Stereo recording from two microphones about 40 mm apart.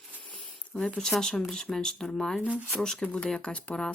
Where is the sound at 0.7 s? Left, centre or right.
Left.